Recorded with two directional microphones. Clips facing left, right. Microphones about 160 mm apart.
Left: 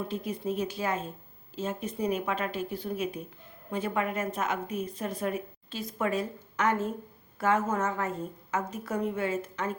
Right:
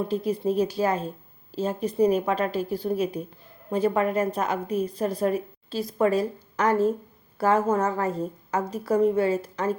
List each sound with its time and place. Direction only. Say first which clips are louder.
0.1 s a woman's voice: right 7 dB; 35° right (ahead or behind)